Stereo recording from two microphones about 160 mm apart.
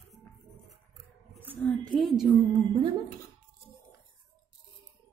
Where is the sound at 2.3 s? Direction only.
25° right (ahead or behind).